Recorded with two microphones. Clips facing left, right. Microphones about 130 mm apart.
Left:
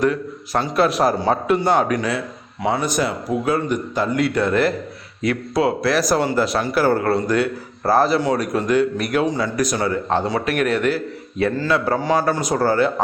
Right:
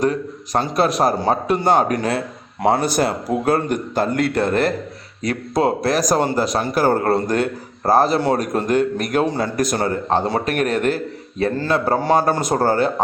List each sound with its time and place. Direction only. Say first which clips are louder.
0.0 s a man's voice: even; 35° right (ahead or behind)
3.4 s speech: right 2 dB; 55° right (ahead or behind); by 11.9 s 40° right (ahead or behind)
12.0 s speech: right 2 dB; 50° right (ahead or behind)